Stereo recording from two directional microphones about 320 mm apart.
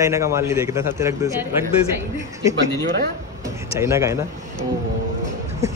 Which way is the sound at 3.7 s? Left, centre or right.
Centre.